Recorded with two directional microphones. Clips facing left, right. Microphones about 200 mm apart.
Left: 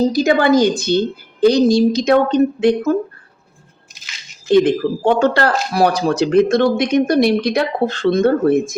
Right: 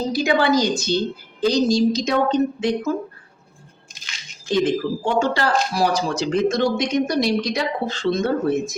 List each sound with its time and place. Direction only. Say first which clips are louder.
0.1 s a woman's voice: left 5 dB; 40° left (ahead or behind); by 2.9 s 60° left (ahead or behind)
4.4 s speech: left 7 dB; 60° left (ahead or behind)